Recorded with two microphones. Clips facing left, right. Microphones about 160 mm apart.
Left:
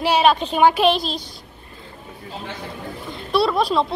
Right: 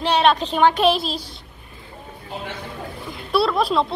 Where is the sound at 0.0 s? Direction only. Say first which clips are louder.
Left 1 dB; 5° left (ahead or behind).